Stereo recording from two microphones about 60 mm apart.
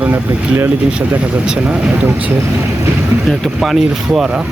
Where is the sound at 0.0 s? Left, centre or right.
Right.